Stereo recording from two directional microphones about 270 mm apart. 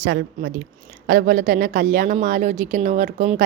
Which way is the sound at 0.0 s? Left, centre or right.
Right.